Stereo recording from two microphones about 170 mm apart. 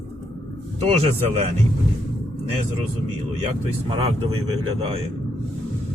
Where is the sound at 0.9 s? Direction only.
35° right (ahead or behind).